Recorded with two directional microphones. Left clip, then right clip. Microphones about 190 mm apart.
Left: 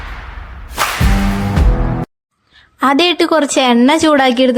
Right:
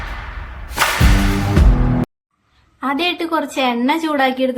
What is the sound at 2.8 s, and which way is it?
A woman's voice, 50° left (ahead or behind).